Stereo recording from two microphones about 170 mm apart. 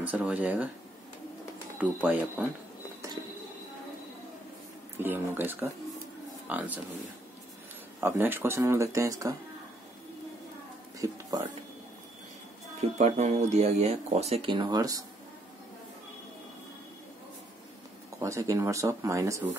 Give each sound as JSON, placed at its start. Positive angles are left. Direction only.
{"t": 0.0, "sound": "speech", "side_deg": -10}
{"t": 1.8, "sound": "speech", "side_deg": -10}
{"t": 4.9, "sound": "speech", "side_deg": -15}
{"t": 8.0, "sound": "speech", "side_deg": -10}
{"t": 11.0, "sound": "speech", "side_deg": -20}
{"t": 12.9, "sound": "speech", "side_deg": -40}
{"t": 18.2, "sound": "speech", "side_deg": -20}